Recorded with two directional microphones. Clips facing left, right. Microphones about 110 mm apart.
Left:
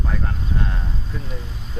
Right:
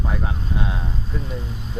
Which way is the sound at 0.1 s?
10° right (ahead or behind).